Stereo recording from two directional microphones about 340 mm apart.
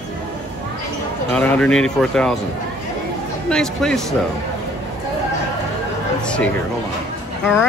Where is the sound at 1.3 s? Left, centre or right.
Centre.